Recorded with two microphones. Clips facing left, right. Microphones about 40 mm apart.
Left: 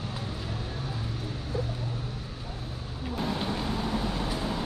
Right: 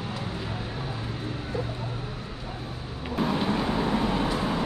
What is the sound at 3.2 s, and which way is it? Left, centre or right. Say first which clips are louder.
Vehicle: right 6 dB; right.